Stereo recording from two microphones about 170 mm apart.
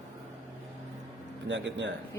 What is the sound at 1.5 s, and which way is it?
Speech, 90° right.